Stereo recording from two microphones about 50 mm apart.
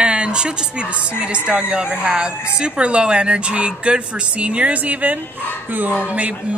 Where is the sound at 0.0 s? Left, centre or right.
Centre; by 5.9 s right.